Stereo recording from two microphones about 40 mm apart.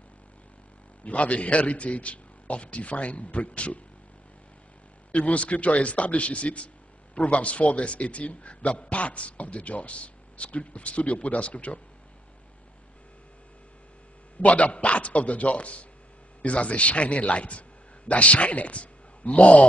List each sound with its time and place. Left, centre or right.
1.0 s a man's voice: left
5.1 s a man's voice: left
14.4 s a man's voice: left